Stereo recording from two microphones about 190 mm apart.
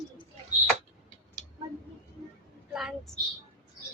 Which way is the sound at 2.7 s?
5° right (ahead or behind).